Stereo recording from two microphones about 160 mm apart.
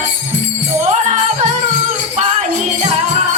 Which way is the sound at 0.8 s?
45° right (ahead or behind).